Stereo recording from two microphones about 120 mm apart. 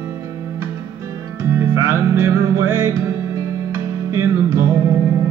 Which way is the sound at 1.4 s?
20° right (ahead or behind).